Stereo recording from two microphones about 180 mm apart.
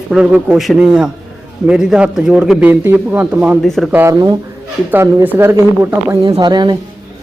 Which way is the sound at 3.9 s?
20° right (ahead or behind).